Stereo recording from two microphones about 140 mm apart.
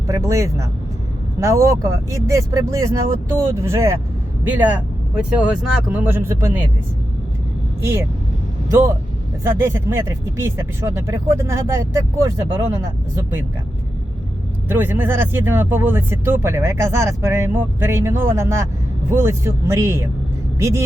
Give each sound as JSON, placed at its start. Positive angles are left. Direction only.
{"t": 0.1, "sound": "speech", "side_deg": -20}
{"t": 8.7, "sound": "speech", "side_deg": -20}
{"t": 14.7, "sound": "speech", "side_deg": -15}